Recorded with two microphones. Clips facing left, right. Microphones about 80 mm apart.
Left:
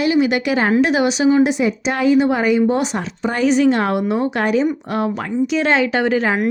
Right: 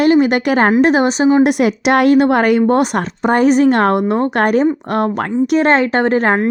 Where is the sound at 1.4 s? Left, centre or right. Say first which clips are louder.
Right 3 dB; right.